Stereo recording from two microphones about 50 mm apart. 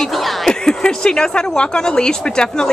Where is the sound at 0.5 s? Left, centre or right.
Centre.